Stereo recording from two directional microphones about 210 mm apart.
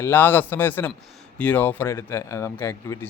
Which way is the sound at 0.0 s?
10° left (ahead or behind).